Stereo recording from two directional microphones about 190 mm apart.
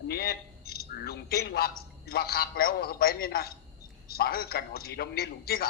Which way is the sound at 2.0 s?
55° left (ahead or behind).